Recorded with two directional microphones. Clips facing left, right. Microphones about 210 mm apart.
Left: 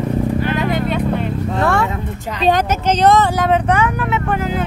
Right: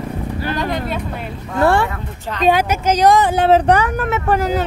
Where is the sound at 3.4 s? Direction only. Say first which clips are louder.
Right 3 dB; 35° right (ahead or behind).